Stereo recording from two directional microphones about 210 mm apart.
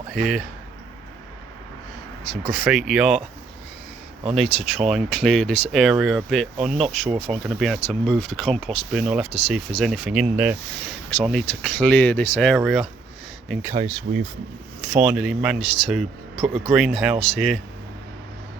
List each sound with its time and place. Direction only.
0.1 s speech: 5° right (ahead or behind)
2.3 s speech: centre (ahead or behind)
4.8 s speech: centre (ahead or behind)
14.1 s speech: 50° right (ahead or behind)
14.9 s speech: 5° right (ahead or behind)